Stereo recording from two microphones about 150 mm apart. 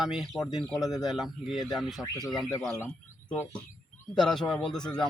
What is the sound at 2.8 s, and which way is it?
Speech, 15° left (ahead or behind).